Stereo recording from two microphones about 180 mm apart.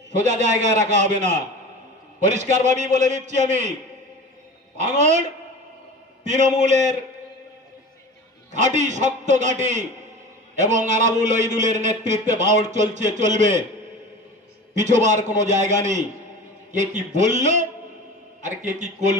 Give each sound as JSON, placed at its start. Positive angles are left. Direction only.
{"t": 0.1, "sound": "a man's voice", "side_deg": -40}
{"t": 4.8, "sound": "a man's voice", "side_deg": -40}
{"t": 6.2, "sound": "a man's voice", "side_deg": -40}
{"t": 8.5, "sound": "a man's voice", "side_deg": -40}
{"t": 14.7, "sound": "a man's voice", "side_deg": -40}